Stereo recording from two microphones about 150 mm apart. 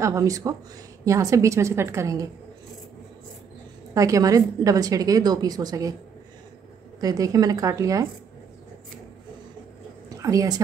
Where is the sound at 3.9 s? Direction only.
20° right (ahead or behind).